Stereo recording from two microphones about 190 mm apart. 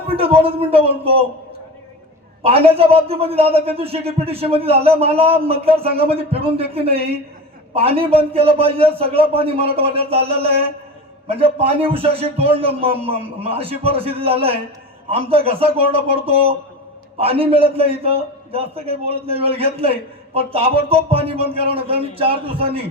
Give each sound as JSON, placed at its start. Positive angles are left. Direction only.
{"t": 0.1, "sound": "speech", "side_deg": -30}
{"t": 2.4, "sound": "a man's voice", "side_deg": -30}
{"t": 17.2, "sound": "a man's voice", "side_deg": -30}